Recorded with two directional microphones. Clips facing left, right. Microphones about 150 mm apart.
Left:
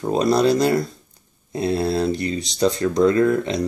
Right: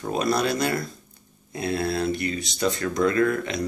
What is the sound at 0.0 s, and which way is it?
Speech, 30° left (ahead or behind).